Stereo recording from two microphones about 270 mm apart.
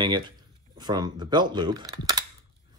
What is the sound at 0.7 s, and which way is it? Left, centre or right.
Speech, centre.